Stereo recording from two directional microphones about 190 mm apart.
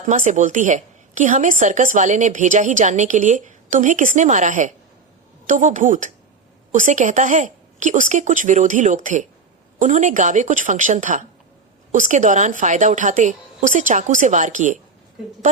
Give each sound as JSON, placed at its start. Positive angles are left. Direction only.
{"t": 0.1, "sound": "a woman's voice", "side_deg": -40}